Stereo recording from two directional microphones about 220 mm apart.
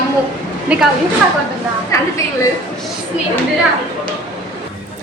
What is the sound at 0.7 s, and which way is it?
Speech, 5° right (ahead or behind).